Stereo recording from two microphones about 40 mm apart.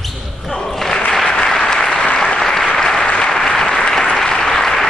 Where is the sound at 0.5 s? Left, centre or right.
Centre.